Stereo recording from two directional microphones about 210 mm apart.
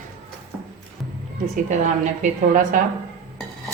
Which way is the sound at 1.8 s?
35° right (ahead or behind).